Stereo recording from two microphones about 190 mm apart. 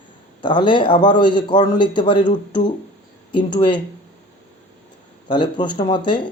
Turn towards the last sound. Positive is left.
turn(degrees=25)  # may be behind; listen again after turning